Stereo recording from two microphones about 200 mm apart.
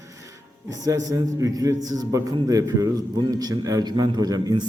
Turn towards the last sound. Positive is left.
turn(degrees=-20)  # may be behind; listen again after turning